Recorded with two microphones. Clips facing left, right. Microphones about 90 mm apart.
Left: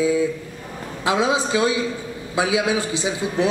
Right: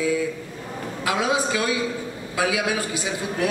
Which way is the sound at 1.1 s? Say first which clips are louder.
Left 3 dB; 25° left (ahead or behind).